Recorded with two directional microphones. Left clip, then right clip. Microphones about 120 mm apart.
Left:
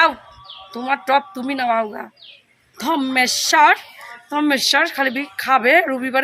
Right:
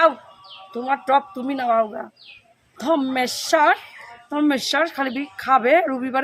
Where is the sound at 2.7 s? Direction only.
15° right (ahead or behind).